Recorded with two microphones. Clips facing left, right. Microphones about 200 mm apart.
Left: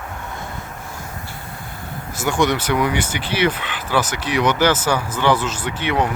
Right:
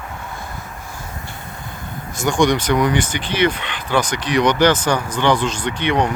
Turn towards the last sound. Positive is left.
turn(degrees=5)  # may be behind; listen again after turning